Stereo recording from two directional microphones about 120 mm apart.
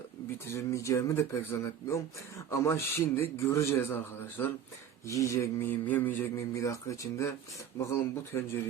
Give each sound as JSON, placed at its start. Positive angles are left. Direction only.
{"t": 0.4, "sound": "speech", "side_deg": 25}